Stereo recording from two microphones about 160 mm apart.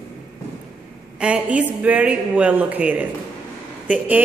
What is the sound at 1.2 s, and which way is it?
A woman's voice, 5° right (ahead or behind).